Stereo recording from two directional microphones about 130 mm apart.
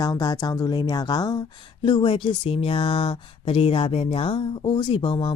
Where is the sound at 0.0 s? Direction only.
30° left (ahead or behind).